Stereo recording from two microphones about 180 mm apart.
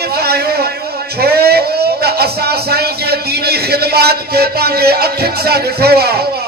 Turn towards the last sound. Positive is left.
turn(degrees=-60)  # may be behind; listen again after turning